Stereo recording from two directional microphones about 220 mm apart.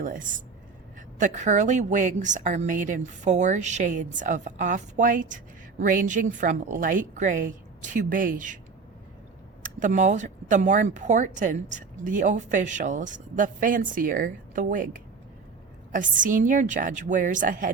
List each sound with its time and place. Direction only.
0.0 s speech: 35° right (ahead or behind)
9.6 s speech: 35° right (ahead or behind)